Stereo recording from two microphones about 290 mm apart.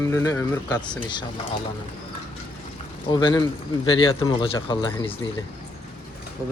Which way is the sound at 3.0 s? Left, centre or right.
Centre.